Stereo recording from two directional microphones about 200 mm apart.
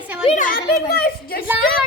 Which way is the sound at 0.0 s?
5° right (ahead or behind).